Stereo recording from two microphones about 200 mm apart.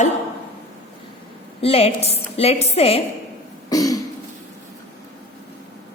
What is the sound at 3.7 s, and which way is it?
Throat clearing, 15° left (ahead or behind).